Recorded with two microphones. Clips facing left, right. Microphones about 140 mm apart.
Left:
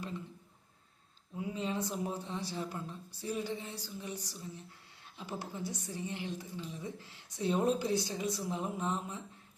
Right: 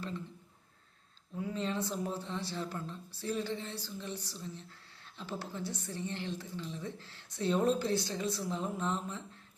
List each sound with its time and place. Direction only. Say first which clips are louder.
1.4 s a woman's voice: right 1 dB; 15° left (ahead or behind)